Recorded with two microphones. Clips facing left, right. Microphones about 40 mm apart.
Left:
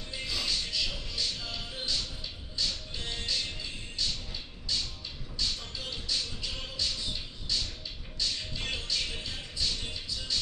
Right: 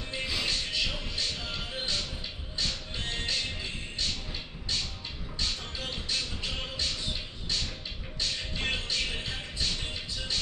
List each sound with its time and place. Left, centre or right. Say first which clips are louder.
0.1 s music: right 2 dB; right
0.7 s music: right 2 dB; right
5.4 s music: right 1 dB; right
7.5 s a sound: even; right
8.2 s music: right 2 dB; right